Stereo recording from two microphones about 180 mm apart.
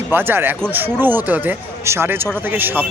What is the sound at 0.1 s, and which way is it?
Speech, 10° right (ahead or behind).